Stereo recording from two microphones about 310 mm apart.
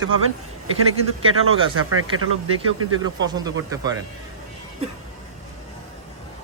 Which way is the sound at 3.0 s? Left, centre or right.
Centre.